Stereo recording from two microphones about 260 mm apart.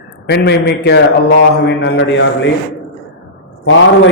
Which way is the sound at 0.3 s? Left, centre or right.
Left.